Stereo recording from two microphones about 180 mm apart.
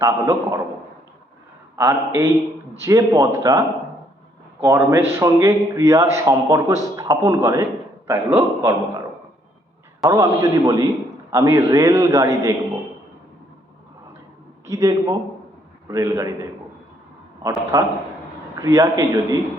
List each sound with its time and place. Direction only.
0.0 s a man's voice: 15° right (ahead or behind)
1.7 s a man's voice: 15° right (ahead or behind)
4.6 s a man's voice: 15° right (ahead or behind)
10.0 s a man's voice: 15° right (ahead or behind)
14.7 s a man's voice: 20° right (ahead or behind)